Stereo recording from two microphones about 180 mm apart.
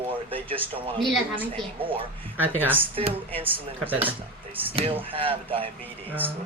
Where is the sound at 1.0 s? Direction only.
Centre (ahead or behind).